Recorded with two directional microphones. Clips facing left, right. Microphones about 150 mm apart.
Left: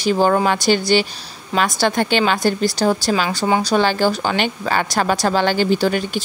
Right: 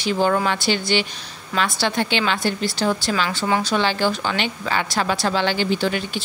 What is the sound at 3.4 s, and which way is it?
Speech, 25° left (ahead or behind).